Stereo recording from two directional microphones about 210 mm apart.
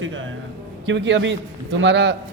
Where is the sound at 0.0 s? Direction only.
65° right (ahead or behind).